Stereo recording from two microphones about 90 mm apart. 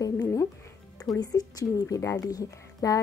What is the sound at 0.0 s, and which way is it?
Music, 40° left (ahead or behind).